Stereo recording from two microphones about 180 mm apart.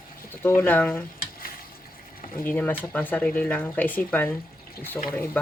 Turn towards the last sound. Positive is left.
turn(degrees=10)  # may be behind; listen again after turning